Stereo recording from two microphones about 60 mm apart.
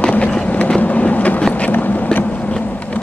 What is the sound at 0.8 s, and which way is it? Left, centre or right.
Vehicle, left.